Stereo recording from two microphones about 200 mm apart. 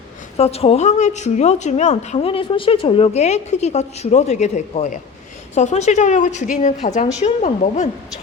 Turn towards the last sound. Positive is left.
turn(degrees=35)  # may be behind; listen again after turning